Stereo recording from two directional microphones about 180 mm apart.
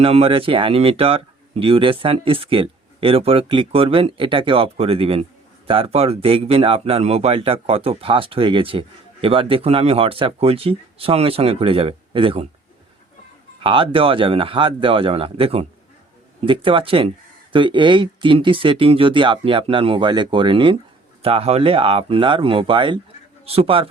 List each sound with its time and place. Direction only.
0.0 s speech: 35° right (ahead or behind)
13.6 s speech: 30° right (ahead or behind)